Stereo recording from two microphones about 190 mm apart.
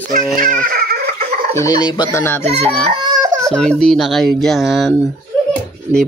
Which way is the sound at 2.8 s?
25° right (ahead or behind).